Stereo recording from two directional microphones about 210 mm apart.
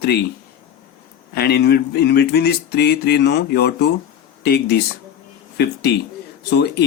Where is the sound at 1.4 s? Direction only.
50° left (ahead or behind).